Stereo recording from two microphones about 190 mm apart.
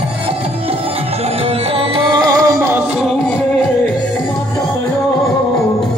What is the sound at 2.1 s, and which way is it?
Music, 20° right (ahead or behind).